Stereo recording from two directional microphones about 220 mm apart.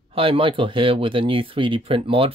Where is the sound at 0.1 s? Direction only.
25° right (ahead or behind).